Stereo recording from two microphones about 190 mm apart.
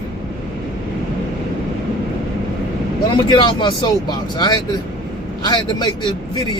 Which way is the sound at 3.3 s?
25° left (ahead or behind).